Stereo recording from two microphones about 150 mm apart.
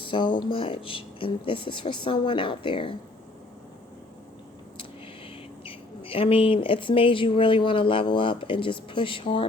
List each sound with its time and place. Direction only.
0.0 s speech: 35° left (ahead or behind)
5.6 s speech: 35° left (ahead or behind)